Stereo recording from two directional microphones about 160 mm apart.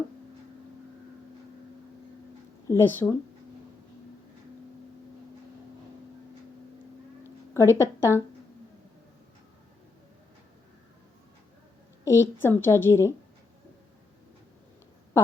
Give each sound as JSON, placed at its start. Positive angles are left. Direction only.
{"t": 2.6, "sound": "speech", "side_deg": 20}
{"t": 7.5, "sound": "a woman's voice", "side_deg": 15}
{"t": 12.0, "sound": "a woman's voice", "side_deg": 15}